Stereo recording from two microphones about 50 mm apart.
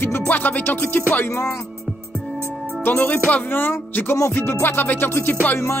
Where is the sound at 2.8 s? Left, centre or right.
Left.